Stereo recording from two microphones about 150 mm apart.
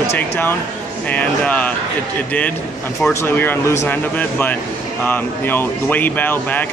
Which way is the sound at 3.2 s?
15° left (ahead or behind).